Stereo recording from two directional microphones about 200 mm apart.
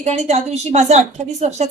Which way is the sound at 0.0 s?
35° right (ahead or behind).